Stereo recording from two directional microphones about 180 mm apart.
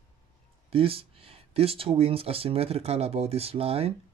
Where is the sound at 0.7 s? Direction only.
30° right (ahead or behind).